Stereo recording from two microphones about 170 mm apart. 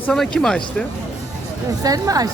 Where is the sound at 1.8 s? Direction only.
20° right (ahead or behind).